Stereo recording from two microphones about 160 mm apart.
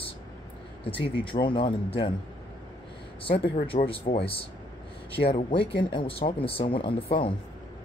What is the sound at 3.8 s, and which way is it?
Speech, 35° left (ahead or behind).